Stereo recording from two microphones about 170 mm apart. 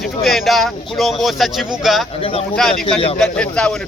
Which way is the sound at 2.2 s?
35° left (ahead or behind).